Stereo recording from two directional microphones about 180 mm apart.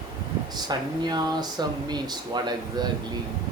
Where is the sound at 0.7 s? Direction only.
20° right (ahead or behind).